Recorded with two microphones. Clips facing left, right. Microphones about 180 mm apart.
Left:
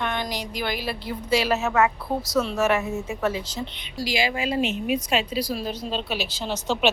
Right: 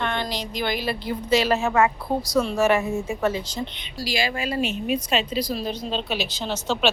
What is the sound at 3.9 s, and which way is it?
A woman's voice, 20° left (ahead or behind).